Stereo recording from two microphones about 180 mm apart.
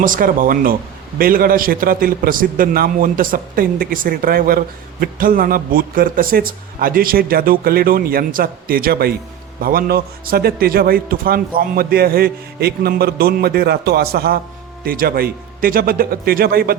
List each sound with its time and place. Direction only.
0.0 s a man's voice: 50° right (ahead or behind)